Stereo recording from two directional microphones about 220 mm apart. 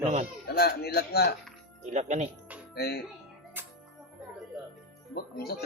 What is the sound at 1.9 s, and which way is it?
Speech, 35° right (ahead or behind).